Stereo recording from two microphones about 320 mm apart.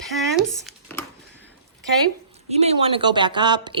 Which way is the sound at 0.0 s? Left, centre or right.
Centre.